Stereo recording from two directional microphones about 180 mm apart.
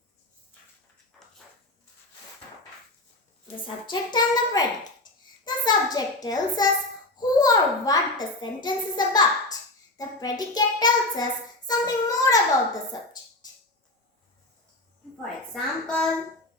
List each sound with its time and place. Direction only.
3.7 s child singing: 25° left (ahead or behind)
5.5 s a sound: 25° left (ahead or behind)
6.2 s child singing: 20° left (ahead or behind)
15.2 s a woman's voice: 5° left (ahead or behind)